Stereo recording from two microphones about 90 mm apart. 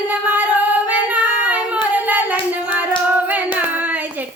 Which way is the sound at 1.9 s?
20° right (ahead or behind).